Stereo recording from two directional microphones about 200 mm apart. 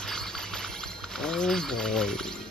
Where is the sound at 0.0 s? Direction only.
5° left (ahead or behind).